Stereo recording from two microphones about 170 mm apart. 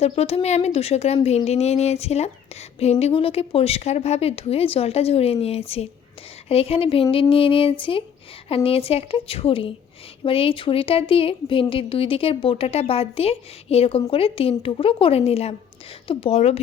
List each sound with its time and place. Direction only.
0.0 s a woman's voice: 35° left (ahead or behind)